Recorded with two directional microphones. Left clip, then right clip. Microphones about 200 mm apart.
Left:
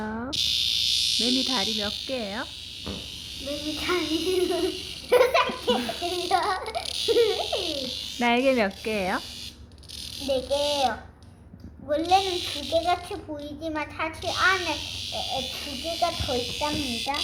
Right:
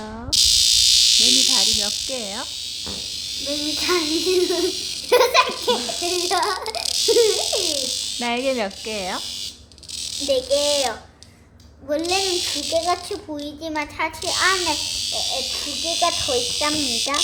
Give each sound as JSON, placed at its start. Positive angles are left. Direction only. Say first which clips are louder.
{"t": 0.3, "sound": "a sound", "louder": "right 9 dB", "side_deg": -25}
{"t": 2.0, "sound": "insect", "louder": "right 3 dB", "side_deg": 5}
{"t": 3.4, "sound": "a child's voice", "louder": "right 6 dB", "side_deg": -20}
{"t": 7.5, "sound": "a sound", "louder": "right 6 dB", "side_deg": -30}
{"t": 8.2, "sound": "speech", "louder": "left 2 dB", "side_deg": 10}
{"t": 10.2, "sound": "a child's voice", "louder": "right 5 dB", "side_deg": -25}
{"t": 12.0, "sound": "a child's voice", "louder": "even", "side_deg": -25}
{"t": 16.6, "sound": "speech", "louder": "right 6 dB", "side_deg": -40}